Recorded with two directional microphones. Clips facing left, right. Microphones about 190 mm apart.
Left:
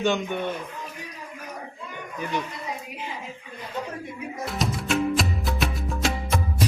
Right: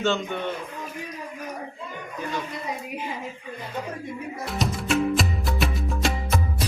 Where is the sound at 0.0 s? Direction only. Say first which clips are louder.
Left 1 dB; 15° left (ahead or behind).